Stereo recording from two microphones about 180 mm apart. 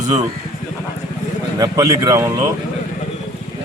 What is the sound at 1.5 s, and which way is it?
Speech, 20° right (ahead or behind).